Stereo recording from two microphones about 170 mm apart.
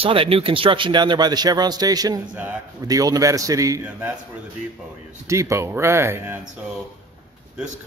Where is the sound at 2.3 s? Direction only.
10° right (ahead or behind).